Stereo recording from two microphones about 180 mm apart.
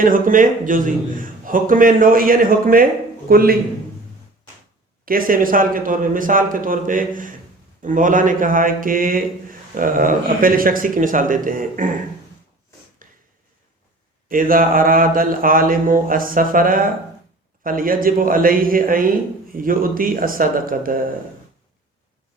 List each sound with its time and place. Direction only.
0.0 s a man's voice: 50° right (ahead or behind)
5.0 s a man's voice: 50° right (ahead or behind)
13.0 s a sound: 50° right (ahead or behind)
14.3 s a man's voice: 50° right (ahead or behind)